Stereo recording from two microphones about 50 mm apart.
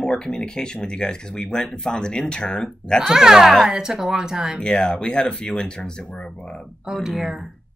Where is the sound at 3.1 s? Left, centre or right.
Centre.